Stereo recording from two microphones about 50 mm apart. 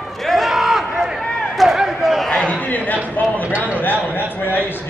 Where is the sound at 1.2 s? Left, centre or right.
Left.